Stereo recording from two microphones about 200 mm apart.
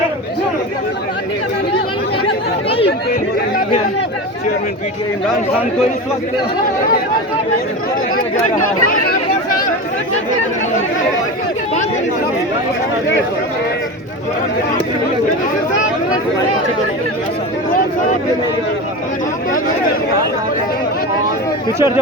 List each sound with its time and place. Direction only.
2.2 s chatter: 30° left (ahead or behind)
8.5 s speech: 45° left (ahead or behind)